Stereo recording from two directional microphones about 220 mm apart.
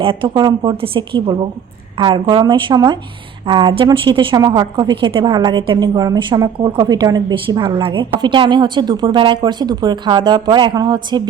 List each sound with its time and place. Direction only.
0.0 s a woman's voice: 25° right (ahead or behind)